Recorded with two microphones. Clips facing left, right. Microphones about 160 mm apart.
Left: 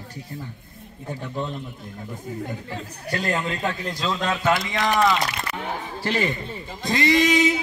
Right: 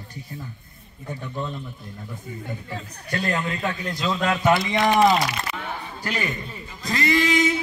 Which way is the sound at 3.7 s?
Centre (ahead or behind).